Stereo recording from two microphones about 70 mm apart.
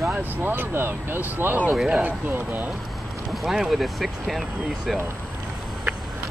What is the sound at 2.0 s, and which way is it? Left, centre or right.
Speech, right.